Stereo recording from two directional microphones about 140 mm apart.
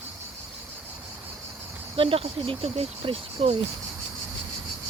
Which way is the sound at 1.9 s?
40° right (ahead or behind).